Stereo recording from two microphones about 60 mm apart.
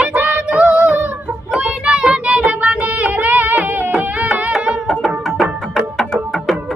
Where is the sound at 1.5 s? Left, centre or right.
Centre.